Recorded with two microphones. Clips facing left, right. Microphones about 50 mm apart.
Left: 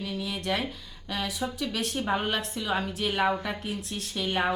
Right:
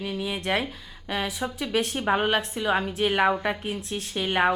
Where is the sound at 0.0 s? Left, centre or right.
Right.